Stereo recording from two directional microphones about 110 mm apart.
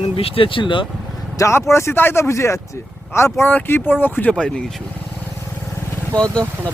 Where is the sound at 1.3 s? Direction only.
25° left (ahead or behind).